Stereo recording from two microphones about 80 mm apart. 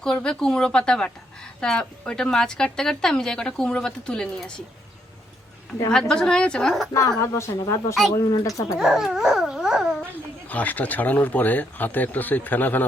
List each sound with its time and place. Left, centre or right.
0.0 s a woman's voice: centre
5.9 s a woman's voice: centre
6.9 s a woman's voice: left
8.8 s dog: centre
10.5 s speech: centre